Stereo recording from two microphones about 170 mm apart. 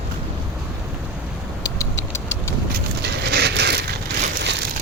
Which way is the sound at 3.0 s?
75° right (ahead or behind).